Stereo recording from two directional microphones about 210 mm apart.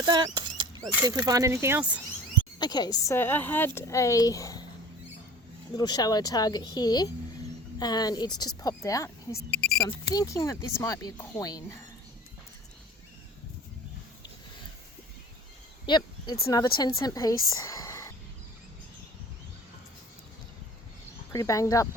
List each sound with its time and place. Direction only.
0.0 s a sound: 20° right (ahead or behind)
1.0 s speech: 15° right (ahead or behind)
2.6 s a woman's voice: 20° left (ahead or behind)
5.7 s a woman's voice: 20° left (ahead or behind)
15.9 s a sound: 20° left (ahead or behind)
16.5 s speech: 20° left (ahead or behind)
21.3 s a woman's voice: 15° left (ahead or behind)